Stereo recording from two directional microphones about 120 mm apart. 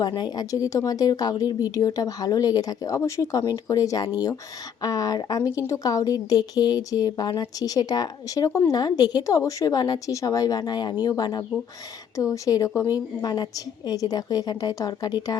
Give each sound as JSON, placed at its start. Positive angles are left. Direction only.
{"t": 0.0, "sound": "a woman's voice", "side_deg": 35}